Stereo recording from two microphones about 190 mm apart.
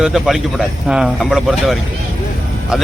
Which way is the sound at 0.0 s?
Centre (ahead or behind).